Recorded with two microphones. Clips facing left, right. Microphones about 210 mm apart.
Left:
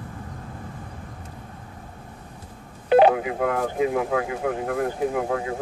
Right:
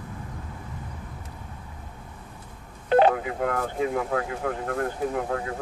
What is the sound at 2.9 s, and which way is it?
Speech, 15° left (ahead or behind).